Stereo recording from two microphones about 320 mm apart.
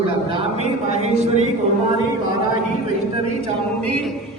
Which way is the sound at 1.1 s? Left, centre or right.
Right.